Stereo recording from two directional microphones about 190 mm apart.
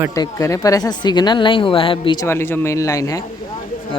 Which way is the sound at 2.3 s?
10° left (ahead or behind).